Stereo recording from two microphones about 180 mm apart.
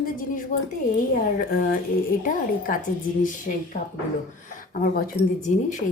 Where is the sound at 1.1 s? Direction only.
50° left (ahead or behind).